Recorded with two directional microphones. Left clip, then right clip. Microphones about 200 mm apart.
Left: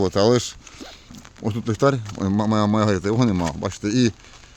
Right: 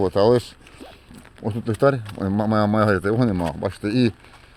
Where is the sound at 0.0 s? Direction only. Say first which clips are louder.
Right 1 dB; 35° left (ahead or behind).